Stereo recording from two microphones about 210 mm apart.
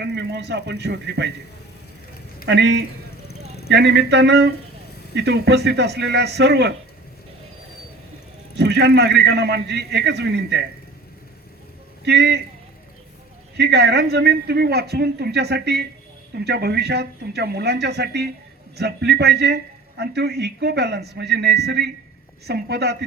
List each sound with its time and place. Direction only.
0.0 s a man's voice: 55° right (ahead or behind)
2.5 s a man's voice: 55° right (ahead or behind)
8.5 s a man's voice: 55° right (ahead or behind)
12.0 s a man's voice: 55° right (ahead or behind)
13.6 s a man's voice: 55° right (ahead or behind)